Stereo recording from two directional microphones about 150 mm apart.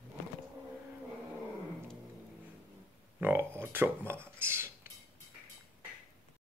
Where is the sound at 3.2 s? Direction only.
15° right (ahead or behind).